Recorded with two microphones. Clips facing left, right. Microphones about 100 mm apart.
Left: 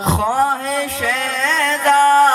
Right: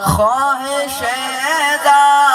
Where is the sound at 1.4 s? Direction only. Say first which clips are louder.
Right 3 dB; 30° right (ahead or behind).